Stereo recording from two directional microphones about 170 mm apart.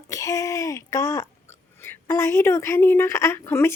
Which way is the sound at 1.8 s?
15° left (ahead or behind).